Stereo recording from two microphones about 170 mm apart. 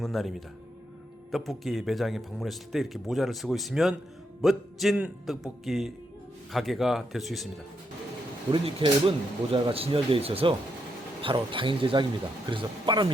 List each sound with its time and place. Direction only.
0.0 s a man's voice: centre (ahead or behind)
8.5 s speech: 30° right (ahead or behind)